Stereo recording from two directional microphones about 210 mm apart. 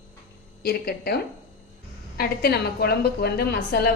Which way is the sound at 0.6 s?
45° left (ahead or behind).